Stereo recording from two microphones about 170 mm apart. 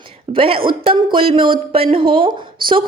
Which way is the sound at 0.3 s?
35° right (ahead or behind).